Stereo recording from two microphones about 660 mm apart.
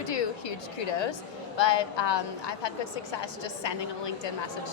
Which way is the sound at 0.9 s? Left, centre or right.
Left.